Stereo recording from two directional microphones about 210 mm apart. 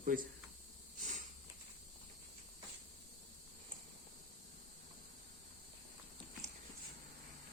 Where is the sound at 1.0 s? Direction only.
35° right (ahead or behind).